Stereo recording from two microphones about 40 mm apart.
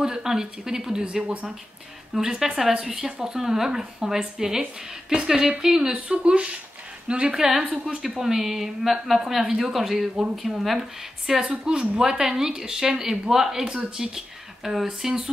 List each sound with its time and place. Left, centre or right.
0.0 s a woman's voice: centre
1.2 s speech: right
2.3 s a woman's voice: centre
5.9 s a woman's voice: right; by 11.4 s centre
11.4 s speech: right
12.0 s a woman's voice: centre